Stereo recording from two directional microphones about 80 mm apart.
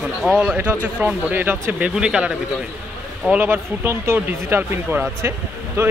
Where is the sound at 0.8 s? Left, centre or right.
Centre.